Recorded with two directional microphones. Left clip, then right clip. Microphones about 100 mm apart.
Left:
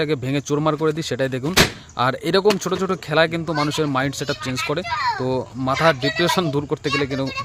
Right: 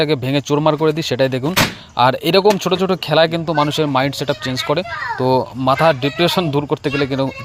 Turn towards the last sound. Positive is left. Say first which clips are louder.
# right 4 dB
turn(degrees=-30)  # may be behind; listen again after turning